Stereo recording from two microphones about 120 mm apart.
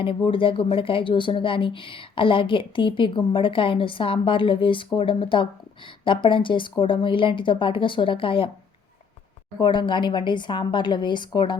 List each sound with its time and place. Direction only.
0.0 s a woman's voice: 50° left (ahead or behind)
9.6 s a woman's voice: 40° left (ahead or behind)